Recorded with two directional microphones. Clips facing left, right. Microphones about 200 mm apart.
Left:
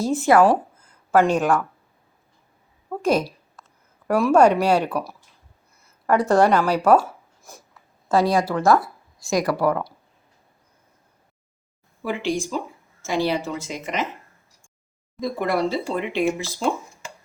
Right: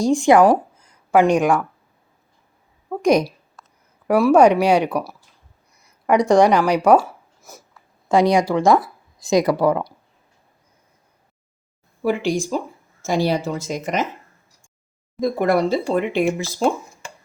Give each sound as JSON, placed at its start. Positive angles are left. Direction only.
{"t": 0.0, "sound": "speech", "side_deg": 5}
{"t": 0.3, "sound": "speech", "side_deg": -15}
{"t": 2.9, "sound": "a sound", "side_deg": -10}
{"t": 4.0, "sound": "speech", "side_deg": -10}
{"t": 8.1, "sound": "speech", "side_deg": -15}
{"t": 13.0, "sound": "a woman's voice", "side_deg": -40}
{"t": 15.2, "sound": "speech", "side_deg": -50}